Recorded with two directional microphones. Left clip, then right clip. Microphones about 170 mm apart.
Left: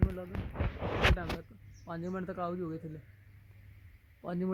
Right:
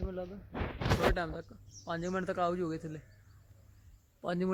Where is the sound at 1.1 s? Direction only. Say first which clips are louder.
Right 2 dB; 20° right (ahead or behind).